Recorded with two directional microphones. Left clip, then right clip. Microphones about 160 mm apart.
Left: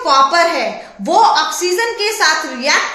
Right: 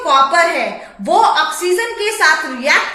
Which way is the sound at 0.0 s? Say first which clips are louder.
Even; 20° left (ahead or behind).